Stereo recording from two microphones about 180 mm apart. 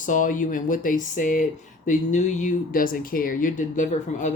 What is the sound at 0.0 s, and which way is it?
Speech, 45° left (ahead or behind).